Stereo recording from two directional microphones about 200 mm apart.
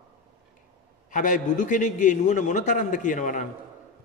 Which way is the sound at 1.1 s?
40° left (ahead or behind).